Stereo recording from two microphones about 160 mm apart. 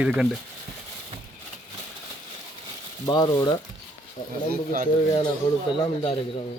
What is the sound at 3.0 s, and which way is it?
Speech, 25° left (ahead or behind).